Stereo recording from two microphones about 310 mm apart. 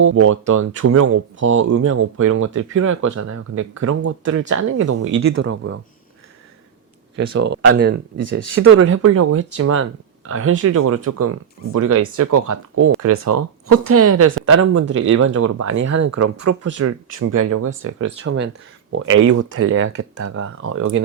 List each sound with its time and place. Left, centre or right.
0.0 s speech: right
0.8 s speech: right
1.0 s speech: right
3.2 s speech: right
7.3 s speech: right
15.9 s speech: right